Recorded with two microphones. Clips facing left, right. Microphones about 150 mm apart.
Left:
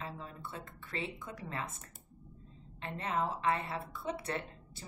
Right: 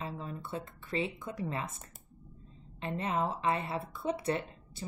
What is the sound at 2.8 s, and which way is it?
Speech, 20° right (ahead or behind).